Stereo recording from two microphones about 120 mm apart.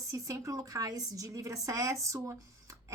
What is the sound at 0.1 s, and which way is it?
A woman's voice, 25° right (ahead or behind).